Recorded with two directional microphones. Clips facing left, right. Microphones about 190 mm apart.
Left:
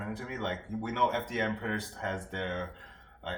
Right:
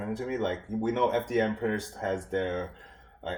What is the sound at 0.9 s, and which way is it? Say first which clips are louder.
Speech: right 5 dB; 40° right (ahead or behind).